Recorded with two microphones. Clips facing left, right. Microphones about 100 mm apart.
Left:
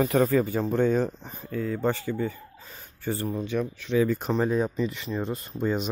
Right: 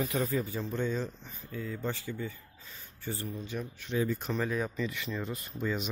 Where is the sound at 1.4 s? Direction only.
65° left (ahead or behind).